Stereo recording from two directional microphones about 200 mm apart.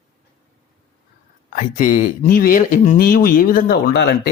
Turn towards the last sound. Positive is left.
turn(degrees=50)  # may be behind; listen again after turning